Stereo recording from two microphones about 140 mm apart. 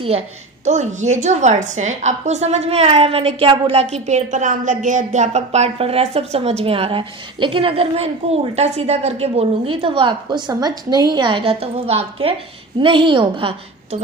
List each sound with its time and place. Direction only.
0.7 s a woman's voice: 55° right (ahead or behind); by 13.6 s 35° right (ahead or behind)